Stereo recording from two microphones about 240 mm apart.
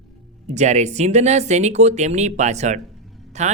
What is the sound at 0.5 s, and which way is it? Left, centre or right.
Speech, right.